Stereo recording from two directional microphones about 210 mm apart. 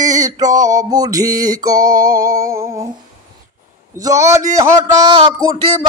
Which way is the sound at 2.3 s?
15° right (ahead or behind).